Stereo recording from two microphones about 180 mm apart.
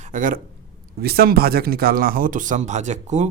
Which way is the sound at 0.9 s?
60° right (ahead or behind).